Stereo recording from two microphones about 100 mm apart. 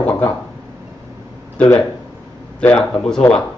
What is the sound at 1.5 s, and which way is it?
A man's voice, 15° left (ahead or behind).